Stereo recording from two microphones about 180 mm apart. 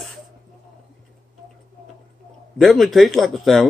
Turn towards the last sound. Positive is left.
turn(degrees=0)  # may be behind; listen again after turning